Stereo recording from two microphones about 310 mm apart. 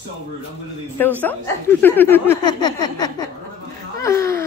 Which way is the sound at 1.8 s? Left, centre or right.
Centre.